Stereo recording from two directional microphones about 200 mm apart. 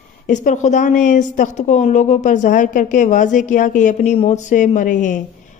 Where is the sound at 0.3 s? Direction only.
35° left (ahead or behind).